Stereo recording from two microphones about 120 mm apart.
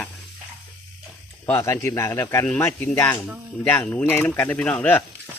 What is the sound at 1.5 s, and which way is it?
A man's voice, 20° left (ahead or behind).